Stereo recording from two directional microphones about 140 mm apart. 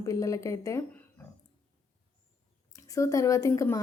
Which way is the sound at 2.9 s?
25° left (ahead or behind).